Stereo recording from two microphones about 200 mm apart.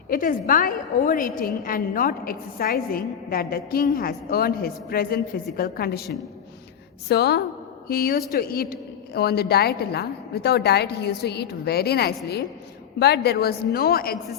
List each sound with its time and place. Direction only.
0.1 s a woman's voice: 45° left (ahead or behind)
7.1 s a woman's voice: 55° left (ahead or behind)